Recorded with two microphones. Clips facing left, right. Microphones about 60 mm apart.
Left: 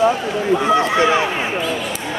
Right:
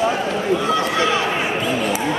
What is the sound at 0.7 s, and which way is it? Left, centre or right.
Run, left.